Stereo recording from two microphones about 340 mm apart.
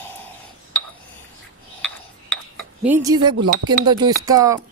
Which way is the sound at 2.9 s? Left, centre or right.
Centre.